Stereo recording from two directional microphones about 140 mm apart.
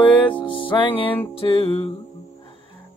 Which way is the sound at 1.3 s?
40° left (ahead or behind).